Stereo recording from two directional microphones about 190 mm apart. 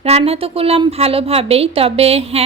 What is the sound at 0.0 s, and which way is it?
A woman's voice, 30° right (ahead or behind).